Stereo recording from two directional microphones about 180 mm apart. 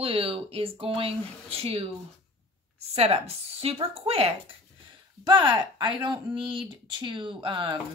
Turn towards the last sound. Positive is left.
turn(degrees=-25)  # may be behind; listen again after turning